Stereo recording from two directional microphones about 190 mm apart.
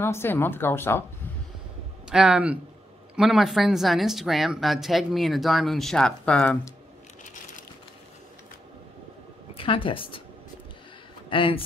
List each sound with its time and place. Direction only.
0.0 s speech: 10° left (ahead or behind)
2.0 s speech: 5° right (ahead or behind)
9.5 s speech: 30° left (ahead or behind)
11.2 s speech: 25° left (ahead or behind)